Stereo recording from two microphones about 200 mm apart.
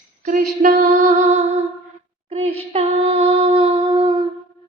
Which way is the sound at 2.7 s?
30° right (ahead or behind).